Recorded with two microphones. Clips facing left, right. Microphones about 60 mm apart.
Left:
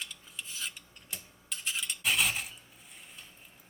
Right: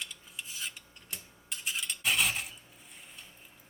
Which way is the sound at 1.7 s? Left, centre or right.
Centre.